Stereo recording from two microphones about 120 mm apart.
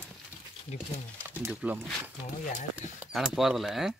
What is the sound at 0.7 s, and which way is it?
Speech, 70° left (ahead or behind).